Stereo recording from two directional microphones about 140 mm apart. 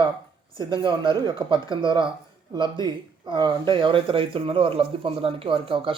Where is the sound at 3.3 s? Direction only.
35° right (ahead or behind).